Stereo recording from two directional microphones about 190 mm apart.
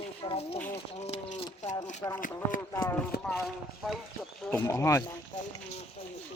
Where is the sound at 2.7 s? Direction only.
15° left (ahead or behind).